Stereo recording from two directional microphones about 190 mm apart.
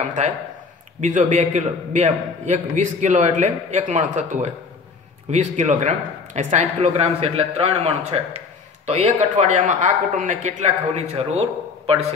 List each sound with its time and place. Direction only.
1.0 s a man's voice: 40° right (ahead or behind)